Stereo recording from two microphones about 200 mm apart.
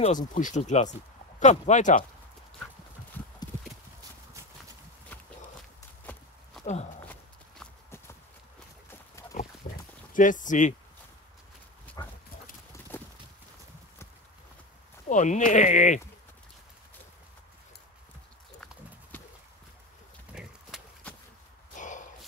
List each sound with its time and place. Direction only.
0.0 s speech: 40° left (ahead or behind)
6.6 s walk: 35° left (ahead or behind)
7.1 s clip-clop: 10° left (ahead or behind)
10.1 s speech: 40° left (ahead or behind)
12.0 s dog: 20° left (ahead or behind)
15.0 s speech: 40° left (ahead or behind)
20.3 s horse: centre (ahead or behind)
21.7 s walk: 40° left (ahead or behind)